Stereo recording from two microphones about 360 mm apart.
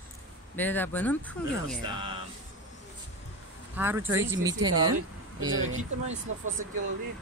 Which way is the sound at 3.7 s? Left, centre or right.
Centre.